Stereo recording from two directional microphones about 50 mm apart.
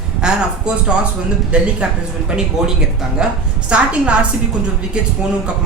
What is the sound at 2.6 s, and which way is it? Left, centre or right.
Speech, centre.